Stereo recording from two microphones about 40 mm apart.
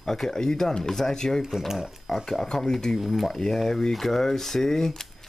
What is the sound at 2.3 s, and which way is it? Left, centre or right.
Speech, centre.